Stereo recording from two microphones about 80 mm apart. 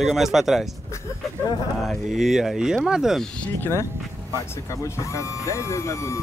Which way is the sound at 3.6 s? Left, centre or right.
Left.